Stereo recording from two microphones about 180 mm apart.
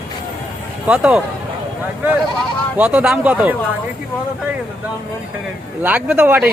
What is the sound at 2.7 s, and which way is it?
Speech, 5° right (ahead or behind).